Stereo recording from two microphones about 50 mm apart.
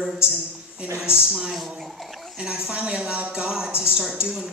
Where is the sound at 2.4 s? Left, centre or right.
Centre.